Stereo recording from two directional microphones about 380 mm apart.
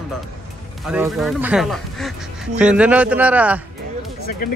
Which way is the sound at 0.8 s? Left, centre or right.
Centre.